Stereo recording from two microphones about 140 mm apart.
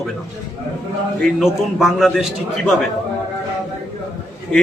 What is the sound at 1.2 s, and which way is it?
A man's voice, centre (ahead or behind).